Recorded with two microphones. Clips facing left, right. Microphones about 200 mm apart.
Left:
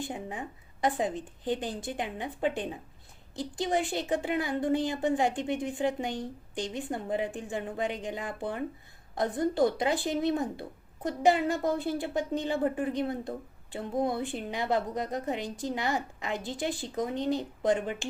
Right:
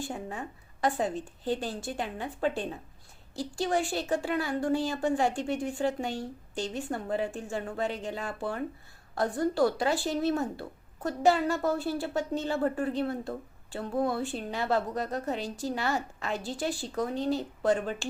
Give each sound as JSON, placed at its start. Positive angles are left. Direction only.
{"t": 0.0, "sound": "a woman's voice", "side_deg": 15}